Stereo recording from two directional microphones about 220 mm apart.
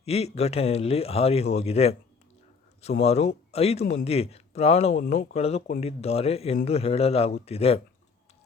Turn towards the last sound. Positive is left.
turn(degrees=25)  # may be behind; listen again after turning